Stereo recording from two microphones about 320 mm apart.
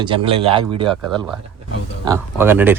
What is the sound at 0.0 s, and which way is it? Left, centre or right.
Speech, centre.